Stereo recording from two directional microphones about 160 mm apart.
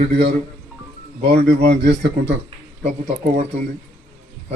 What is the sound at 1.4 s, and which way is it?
Speech, 90° right.